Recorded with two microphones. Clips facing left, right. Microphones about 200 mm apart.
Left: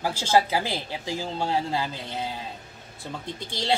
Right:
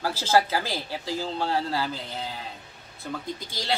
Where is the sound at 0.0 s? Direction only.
15° left (ahead or behind).